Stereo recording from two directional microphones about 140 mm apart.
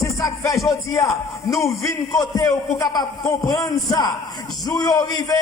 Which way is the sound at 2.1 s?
30° left (ahead or behind).